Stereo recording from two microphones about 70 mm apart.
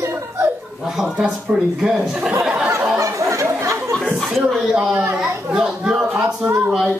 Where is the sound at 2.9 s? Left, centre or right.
Right.